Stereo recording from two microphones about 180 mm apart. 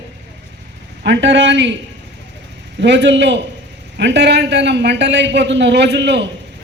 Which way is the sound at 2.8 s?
75° right (ahead or behind).